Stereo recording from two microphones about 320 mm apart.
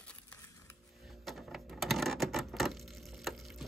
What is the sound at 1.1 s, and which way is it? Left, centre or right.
Coin, centre.